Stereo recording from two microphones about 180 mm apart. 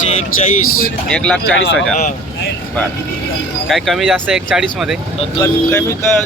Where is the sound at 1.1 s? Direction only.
5° left (ahead or behind).